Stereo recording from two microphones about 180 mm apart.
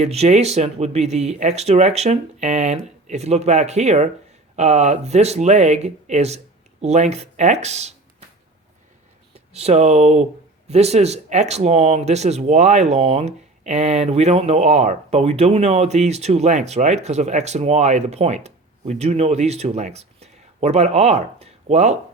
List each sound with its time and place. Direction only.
0.0 s speech: 35° right (ahead or behind)
9.3 s speech: 35° right (ahead or behind)